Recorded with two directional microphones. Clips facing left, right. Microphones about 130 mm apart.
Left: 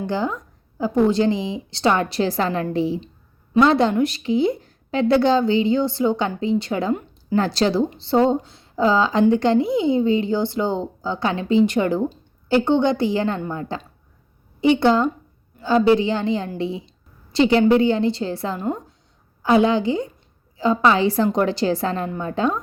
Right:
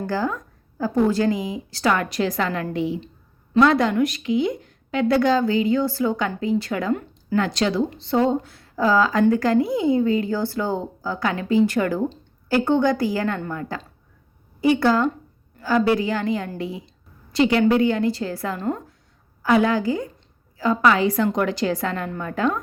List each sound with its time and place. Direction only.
0.0 s a woman's voice: 20° left (ahead or behind)